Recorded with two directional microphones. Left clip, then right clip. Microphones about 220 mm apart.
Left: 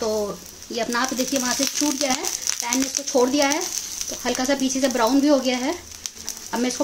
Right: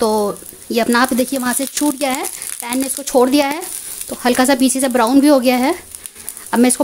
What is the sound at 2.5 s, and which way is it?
Frying, 50° right (ahead or behind).